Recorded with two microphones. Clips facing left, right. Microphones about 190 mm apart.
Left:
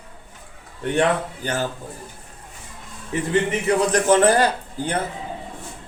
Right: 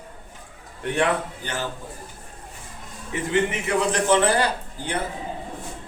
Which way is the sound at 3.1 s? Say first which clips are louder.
Left 2 dB; 35° left (ahead or behind).